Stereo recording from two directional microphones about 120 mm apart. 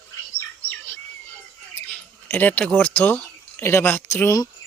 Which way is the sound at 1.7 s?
15° left (ahead or behind).